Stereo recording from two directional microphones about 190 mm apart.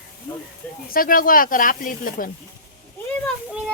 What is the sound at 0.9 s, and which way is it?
Speech, 50° left (ahead or behind).